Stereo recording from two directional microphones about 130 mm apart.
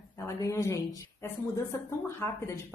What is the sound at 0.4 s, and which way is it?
A woman's voice, 25° left (ahead or behind).